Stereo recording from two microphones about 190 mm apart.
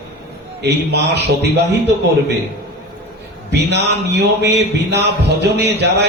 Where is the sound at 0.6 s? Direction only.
65° right (ahead or behind).